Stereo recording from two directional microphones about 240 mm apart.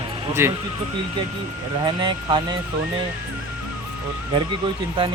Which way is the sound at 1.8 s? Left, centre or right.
Centre.